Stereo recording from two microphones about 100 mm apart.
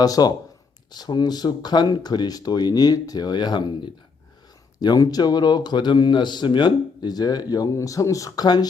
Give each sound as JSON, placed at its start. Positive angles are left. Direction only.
{"t": 0.0, "sound": "speech", "side_deg": 40}